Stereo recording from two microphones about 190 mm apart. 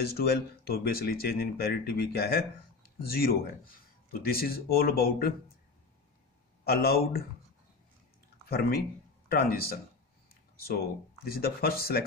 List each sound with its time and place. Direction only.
0.1 s speech: 55° left (ahead or behind)
6.6 s speech: 55° left (ahead or behind)
8.5 s speech: 55° left (ahead or behind)
11.2 s speech: 50° left (ahead or behind)